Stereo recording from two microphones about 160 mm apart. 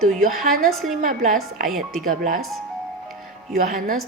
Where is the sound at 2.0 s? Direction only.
60° right (ahead or behind).